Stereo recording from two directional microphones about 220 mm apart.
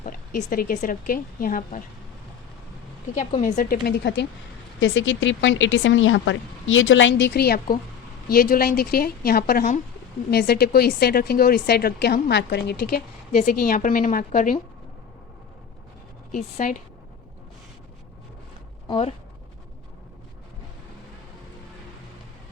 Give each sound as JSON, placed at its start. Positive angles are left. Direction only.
{"t": 0.0, "sound": "speech", "side_deg": 35}
{"t": 3.2, "sound": "speech", "side_deg": 35}
{"t": 13.3, "sound": "speech", "side_deg": 35}
{"t": 16.3, "sound": "speech", "side_deg": 40}
{"t": 18.9, "sound": "speech", "side_deg": 25}